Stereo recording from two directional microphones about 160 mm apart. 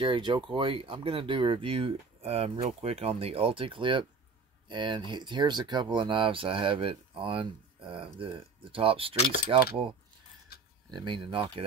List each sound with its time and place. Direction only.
0.0 s speech: 30° right (ahead or behind)
10.9 s speech: 30° right (ahead or behind)